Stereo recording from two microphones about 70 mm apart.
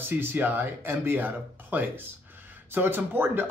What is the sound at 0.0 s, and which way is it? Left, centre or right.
Speech, right.